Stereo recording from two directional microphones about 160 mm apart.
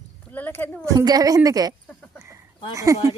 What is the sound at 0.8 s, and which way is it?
A woman's voice, 25° right (ahead or behind).